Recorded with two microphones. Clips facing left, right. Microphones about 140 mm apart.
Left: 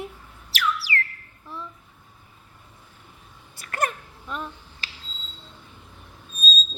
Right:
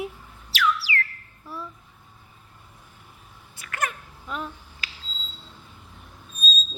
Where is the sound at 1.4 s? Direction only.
5° right (ahead or behind).